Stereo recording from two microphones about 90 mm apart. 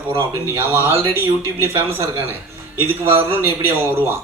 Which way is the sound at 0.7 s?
25° right (ahead or behind).